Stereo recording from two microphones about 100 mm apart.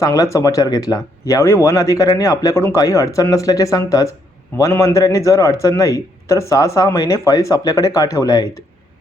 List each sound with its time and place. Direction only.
0.0 s a man's voice: 30° left (ahead or behind)